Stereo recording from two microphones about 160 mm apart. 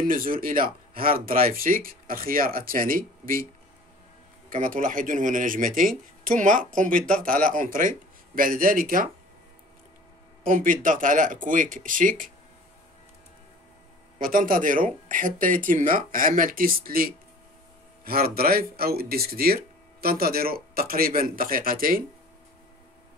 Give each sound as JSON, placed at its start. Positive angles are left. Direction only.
{"t": 0.0, "sound": "speech", "side_deg": -60}
{"t": 4.5, "sound": "speech", "side_deg": -55}
{"t": 6.9, "sound": "speech", "side_deg": 5}
{"t": 7.2, "sound": "speech", "side_deg": -60}
{"t": 10.4, "sound": "speech", "side_deg": -55}
{"t": 14.1, "sound": "speech", "side_deg": -55}